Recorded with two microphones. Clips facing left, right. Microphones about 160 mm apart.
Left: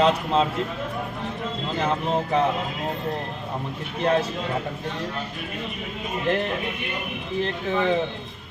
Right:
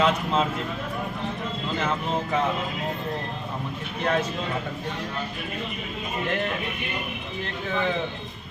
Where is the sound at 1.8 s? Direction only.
35° left (ahead or behind).